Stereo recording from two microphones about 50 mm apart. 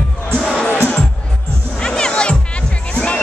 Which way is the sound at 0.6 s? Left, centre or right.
Left.